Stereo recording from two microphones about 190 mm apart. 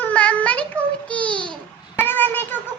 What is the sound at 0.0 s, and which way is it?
Babbling, 5° left (ahead or behind).